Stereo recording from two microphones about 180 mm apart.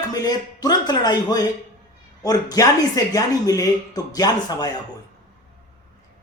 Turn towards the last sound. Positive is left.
turn(degrees=20)  # may be behind; listen again after turning